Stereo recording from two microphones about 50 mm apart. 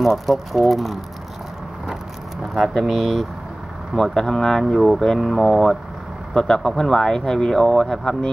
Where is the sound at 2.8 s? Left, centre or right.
Centre.